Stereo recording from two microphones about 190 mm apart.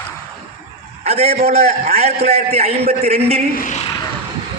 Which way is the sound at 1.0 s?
30° right (ahead or behind).